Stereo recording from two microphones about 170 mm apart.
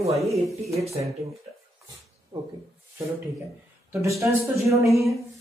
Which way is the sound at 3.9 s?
15° right (ahead or behind).